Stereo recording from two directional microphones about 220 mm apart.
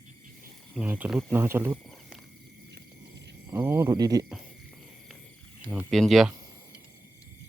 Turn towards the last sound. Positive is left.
turn(degrees=0)  # may be behind; listen again after turning